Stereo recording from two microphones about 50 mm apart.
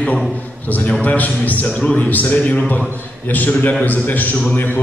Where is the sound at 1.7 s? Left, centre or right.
Left.